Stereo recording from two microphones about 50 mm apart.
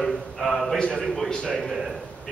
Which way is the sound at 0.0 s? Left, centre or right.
Centre.